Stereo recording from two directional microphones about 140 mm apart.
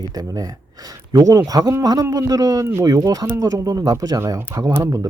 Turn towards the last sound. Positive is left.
turn(degrees=-20)  # may be behind; listen again after turning